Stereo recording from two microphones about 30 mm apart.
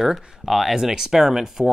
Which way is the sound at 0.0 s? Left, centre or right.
Centre.